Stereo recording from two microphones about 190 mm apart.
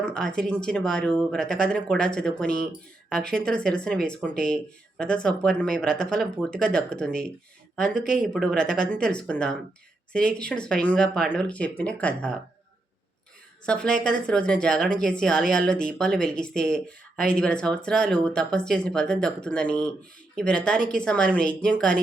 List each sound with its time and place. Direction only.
0.0 s speech: 5° left (ahead or behind)
13.7 s speech: 5° left (ahead or behind)